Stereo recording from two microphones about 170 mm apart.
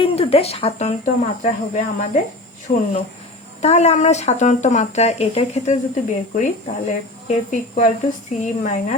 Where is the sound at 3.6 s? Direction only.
40° left (ahead or behind).